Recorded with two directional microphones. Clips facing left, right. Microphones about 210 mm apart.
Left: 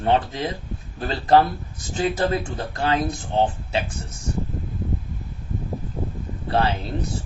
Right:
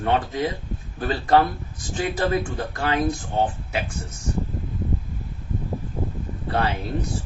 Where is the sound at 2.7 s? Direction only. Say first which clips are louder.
Left 2 dB; 30° left (ahead or behind).